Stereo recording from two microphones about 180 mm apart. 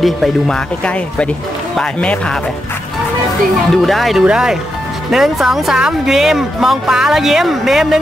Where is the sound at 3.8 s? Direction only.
Centre (ahead or behind).